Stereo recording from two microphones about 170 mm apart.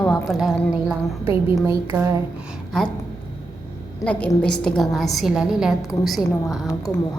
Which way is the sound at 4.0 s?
5° left (ahead or behind).